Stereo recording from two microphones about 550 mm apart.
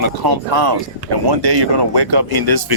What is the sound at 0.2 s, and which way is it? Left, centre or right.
Speech, right.